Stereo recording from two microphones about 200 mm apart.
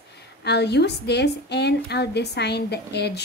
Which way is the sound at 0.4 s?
55° left (ahead or behind).